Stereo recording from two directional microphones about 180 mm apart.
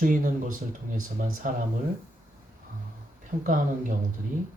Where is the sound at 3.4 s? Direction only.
45° right (ahead or behind).